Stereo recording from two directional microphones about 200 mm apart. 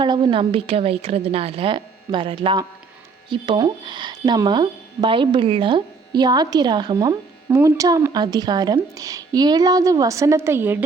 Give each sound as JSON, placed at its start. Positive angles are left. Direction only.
{"t": 0.0, "sound": "speech", "side_deg": -25}